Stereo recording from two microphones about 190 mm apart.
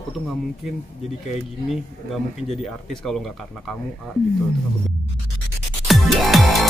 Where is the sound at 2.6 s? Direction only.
Centre (ahead or behind).